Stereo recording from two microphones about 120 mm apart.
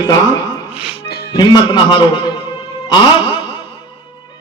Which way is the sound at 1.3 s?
35° left (ahead or behind).